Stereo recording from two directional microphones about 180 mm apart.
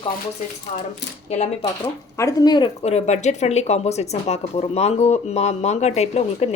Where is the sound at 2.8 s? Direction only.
40° left (ahead or behind).